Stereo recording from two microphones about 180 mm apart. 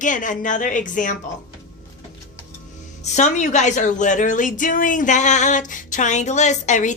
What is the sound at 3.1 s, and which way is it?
Speech, 40° left (ahead or behind).